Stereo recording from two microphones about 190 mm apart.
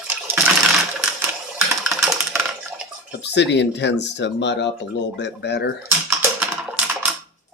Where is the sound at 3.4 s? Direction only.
65° left (ahead or behind).